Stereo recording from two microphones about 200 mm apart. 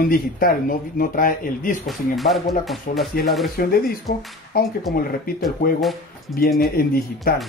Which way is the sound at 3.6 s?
45° left (ahead or behind).